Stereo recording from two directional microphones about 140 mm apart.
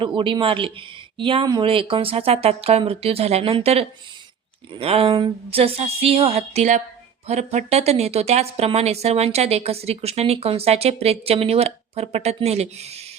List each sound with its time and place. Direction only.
0.0 s speech: 35° right (ahead or behind)